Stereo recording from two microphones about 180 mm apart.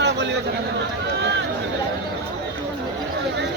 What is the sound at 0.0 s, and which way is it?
Chatter, 75° right (ahead or behind).